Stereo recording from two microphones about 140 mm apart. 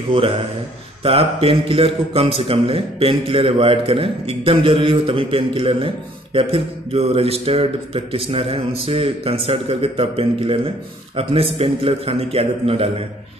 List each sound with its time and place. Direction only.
1.0 s a man's voice: 40° right (ahead or behind)